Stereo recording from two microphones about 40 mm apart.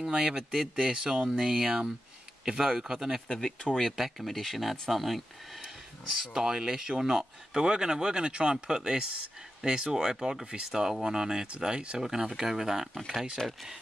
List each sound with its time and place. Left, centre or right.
0.3 s speech: centre
1.4 s speech: centre
1.7 s speech: right
3.3 s speech: centre
3.9 s speech: centre
6.1 s speech: centre
12.0 s speech: centre
13.4 s speech: centre